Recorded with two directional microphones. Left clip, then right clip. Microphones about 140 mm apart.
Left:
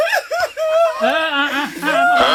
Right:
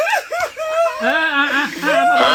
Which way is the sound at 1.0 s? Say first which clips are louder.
Even; 45° left (ahead or behind).